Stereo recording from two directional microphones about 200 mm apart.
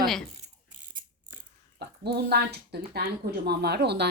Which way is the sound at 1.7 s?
55° right (ahead or behind).